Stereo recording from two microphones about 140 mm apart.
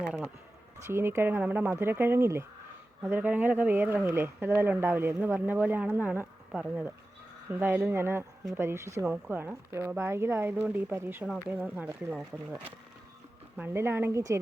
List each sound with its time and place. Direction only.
0.9 s speech: 20° right (ahead or behind)
13.6 s a woman's voice: 15° right (ahead or behind)